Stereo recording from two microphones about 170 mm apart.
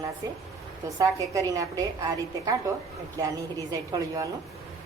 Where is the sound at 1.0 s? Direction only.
20° right (ahead or behind).